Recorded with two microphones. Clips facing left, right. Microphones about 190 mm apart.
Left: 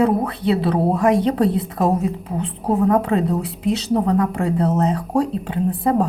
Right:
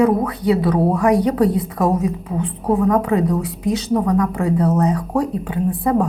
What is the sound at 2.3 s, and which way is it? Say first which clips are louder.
A woman's voice: right 1 dB; 30° left (ahead or behind).